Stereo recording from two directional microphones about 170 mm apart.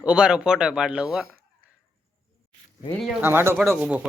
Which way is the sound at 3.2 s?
15° right (ahead or behind).